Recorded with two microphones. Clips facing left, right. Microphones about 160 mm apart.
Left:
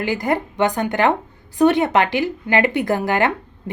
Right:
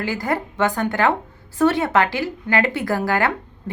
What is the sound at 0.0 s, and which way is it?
A woman's voice, 20° left (ahead or behind).